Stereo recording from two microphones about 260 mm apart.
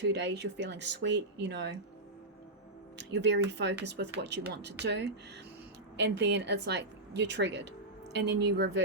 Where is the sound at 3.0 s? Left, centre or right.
Right.